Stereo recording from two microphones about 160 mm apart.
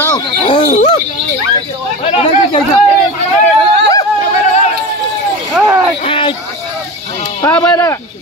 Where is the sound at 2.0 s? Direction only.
40° left (ahead or behind).